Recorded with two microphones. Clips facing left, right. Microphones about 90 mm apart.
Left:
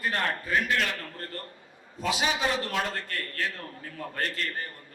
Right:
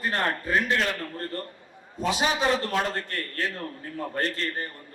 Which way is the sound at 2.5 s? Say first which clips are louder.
Right 4 dB; 30° right (ahead or behind).